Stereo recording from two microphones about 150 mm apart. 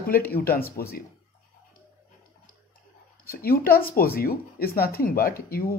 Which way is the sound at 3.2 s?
75° left (ahead or behind).